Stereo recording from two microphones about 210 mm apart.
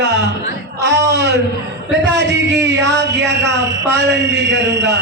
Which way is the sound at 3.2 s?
55° right (ahead or behind).